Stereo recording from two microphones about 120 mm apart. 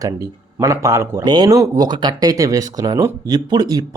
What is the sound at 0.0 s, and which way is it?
Speech, 30° right (ahead or behind).